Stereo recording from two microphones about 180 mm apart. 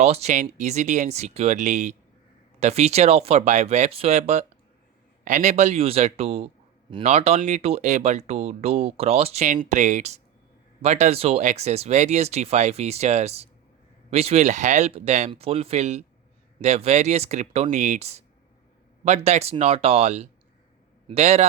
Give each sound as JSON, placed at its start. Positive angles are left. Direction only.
{"t": 0.0, "sound": "speech", "side_deg": -35}